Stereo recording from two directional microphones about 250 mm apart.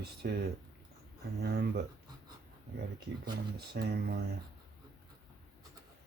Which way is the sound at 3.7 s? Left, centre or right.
Right.